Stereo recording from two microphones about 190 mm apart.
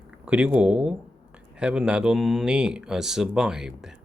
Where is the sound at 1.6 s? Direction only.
5° right (ahead or behind).